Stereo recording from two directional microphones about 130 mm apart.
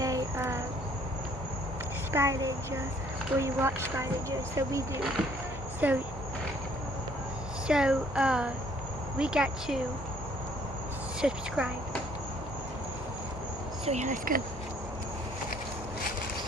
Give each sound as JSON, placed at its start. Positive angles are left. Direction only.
{"t": 0.0, "sound": "cricket", "side_deg": -25}
{"t": 2.1, "sound": "speech", "side_deg": -20}
{"t": 5.8, "sound": "speech", "side_deg": -15}
{"t": 7.6, "sound": "speech", "side_deg": -5}
{"t": 11.1, "sound": "speech", "side_deg": -5}
{"t": 13.8, "sound": "speech", "side_deg": -65}